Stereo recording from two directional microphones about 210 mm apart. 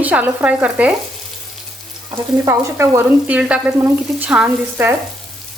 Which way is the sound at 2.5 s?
10° right (ahead or behind).